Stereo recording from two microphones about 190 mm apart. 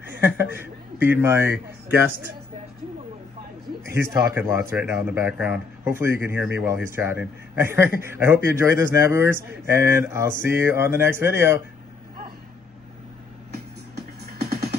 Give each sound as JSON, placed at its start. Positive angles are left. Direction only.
{"t": 0.4, "sound": "a man's voice", "side_deg": -10}
{"t": 3.9, "sound": "speech", "side_deg": -15}
{"t": 13.9, "sound": "music", "side_deg": -55}